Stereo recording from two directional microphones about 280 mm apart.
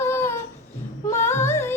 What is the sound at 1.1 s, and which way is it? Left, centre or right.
Female singing, centre.